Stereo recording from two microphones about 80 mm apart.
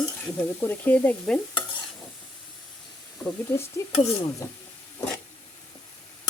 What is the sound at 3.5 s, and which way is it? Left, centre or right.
Stir, left.